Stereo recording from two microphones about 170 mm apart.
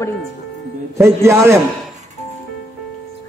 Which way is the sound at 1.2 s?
15° right (ahead or behind).